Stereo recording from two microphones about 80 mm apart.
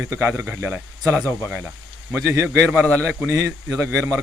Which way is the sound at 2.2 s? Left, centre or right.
Right.